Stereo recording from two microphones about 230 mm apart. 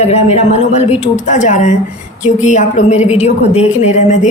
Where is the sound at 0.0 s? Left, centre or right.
Left.